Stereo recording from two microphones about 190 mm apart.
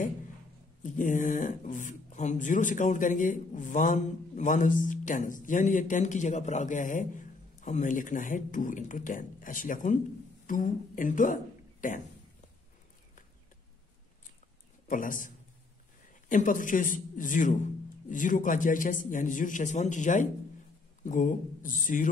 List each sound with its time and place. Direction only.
0.8 s speech: 45° left (ahead or behind)
14.9 s speech: 45° left (ahead or behind)